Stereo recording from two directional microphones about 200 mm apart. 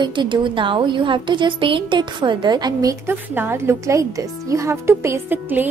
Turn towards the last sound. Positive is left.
turn(degrees=-10)  # may be behind; listen again after turning